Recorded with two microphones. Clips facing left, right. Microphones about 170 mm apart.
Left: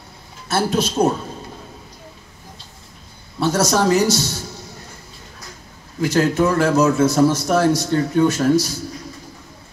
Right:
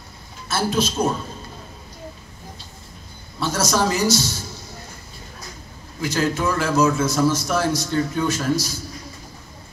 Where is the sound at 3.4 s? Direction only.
65° left (ahead or behind).